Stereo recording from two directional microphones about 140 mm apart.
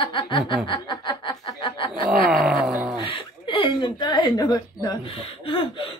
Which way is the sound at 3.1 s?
35° left (ahead or behind).